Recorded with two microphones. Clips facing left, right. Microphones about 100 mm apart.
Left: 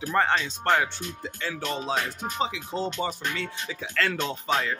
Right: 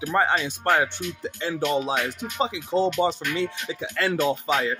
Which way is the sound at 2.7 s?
30° right (ahead or behind).